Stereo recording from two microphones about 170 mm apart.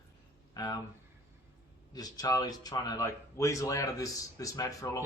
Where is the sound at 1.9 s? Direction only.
20° left (ahead or behind).